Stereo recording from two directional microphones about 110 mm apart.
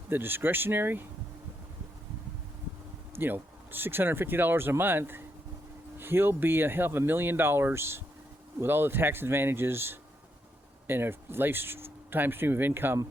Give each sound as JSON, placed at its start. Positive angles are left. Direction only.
{"t": 0.1, "sound": "speech", "side_deg": -20}
{"t": 3.2, "sound": "speech", "side_deg": -20}